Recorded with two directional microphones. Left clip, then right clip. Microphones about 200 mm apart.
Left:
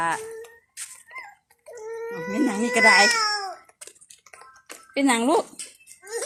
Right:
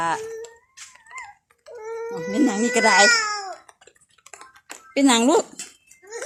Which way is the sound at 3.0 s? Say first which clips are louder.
Right 3 dB; 15° left (ahead or behind).